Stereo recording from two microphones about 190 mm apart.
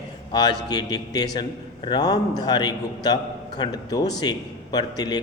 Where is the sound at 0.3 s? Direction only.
25° left (ahead or behind).